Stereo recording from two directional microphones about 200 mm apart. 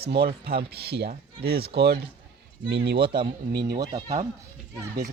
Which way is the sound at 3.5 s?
55° right (ahead or behind).